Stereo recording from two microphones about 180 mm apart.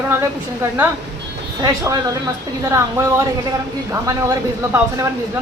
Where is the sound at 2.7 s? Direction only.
15° right (ahead or behind).